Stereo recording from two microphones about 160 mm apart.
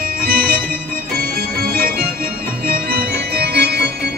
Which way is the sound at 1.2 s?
70° right (ahead or behind).